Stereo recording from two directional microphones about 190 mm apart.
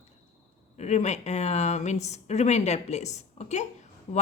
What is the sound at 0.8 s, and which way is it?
Speech, 35° left (ahead or behind).